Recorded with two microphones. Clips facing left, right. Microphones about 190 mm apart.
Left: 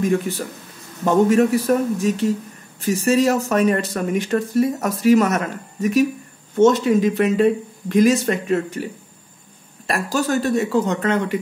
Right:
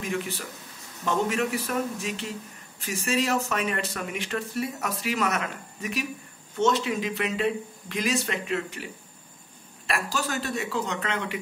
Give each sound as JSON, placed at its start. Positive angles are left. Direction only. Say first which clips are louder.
{"t": 0.0, "sound": "speech", "louder": "left 11 dB", "side_deg": 45}
{"t": 9.8, "sound": "speech", "louder": "left 9 dB", "side_deg": 45}